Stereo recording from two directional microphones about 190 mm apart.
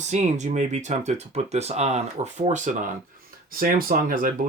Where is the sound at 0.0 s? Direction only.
40° right (ahead or behind).